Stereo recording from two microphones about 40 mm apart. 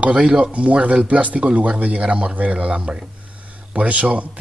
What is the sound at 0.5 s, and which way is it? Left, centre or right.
Speech, right.